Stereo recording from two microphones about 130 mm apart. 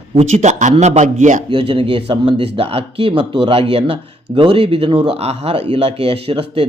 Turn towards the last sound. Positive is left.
turn(degrees=-45)  # may be behind; listen again after turning